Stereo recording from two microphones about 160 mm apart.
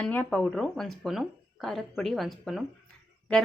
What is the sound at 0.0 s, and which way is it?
Speech, 10° left (ahead or behind).